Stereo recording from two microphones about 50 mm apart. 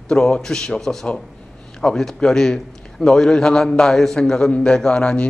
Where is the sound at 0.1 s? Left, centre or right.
Centre.